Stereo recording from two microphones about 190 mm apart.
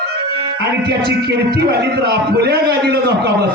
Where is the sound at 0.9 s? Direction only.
60° right (ahead or behind).